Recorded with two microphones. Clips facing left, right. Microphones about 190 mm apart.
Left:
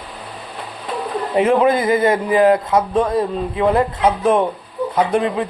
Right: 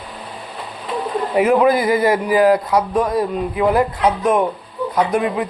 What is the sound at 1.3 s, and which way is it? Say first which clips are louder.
Speech: even; 25° left (ahead or behind).